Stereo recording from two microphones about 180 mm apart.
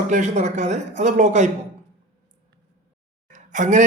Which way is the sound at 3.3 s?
45° right (ahead or behind).